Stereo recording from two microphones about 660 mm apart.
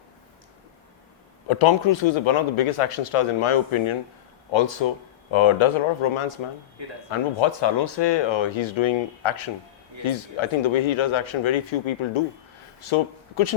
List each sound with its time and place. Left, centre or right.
1.5 s speech: left